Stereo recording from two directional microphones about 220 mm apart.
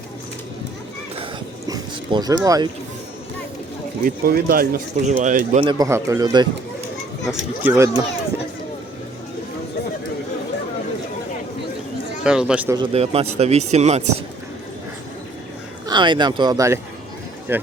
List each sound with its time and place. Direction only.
1.2 s a sound: 20° right (ahead or behind)
4.0 s speech: 45° right (ahead or behind)
5.5 s a man's voice: 20° right (ahead or behind)
7.3 s a man's voice: 5° right (ahead or behind)
12.2 s speech: 5° right (ahead or behind)
12.7 s speech: 25° right (ahead or behind)
15.9 s a man's voice: 20° right (ahead or behind)